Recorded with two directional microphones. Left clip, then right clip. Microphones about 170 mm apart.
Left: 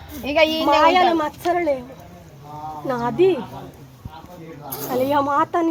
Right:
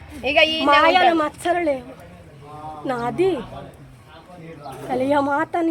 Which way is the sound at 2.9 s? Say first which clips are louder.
Left 3 dB; 10° right (ahead or behind).